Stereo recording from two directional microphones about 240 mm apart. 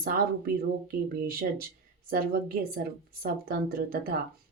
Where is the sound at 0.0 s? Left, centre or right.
Right.